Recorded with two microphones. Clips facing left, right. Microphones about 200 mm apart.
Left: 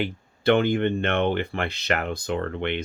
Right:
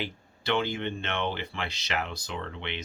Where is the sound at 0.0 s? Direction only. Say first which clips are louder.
Left 11 dB; 55° left (ahead or behind).